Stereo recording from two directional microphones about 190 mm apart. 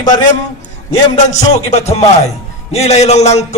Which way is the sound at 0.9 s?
35° left (ahead or behind).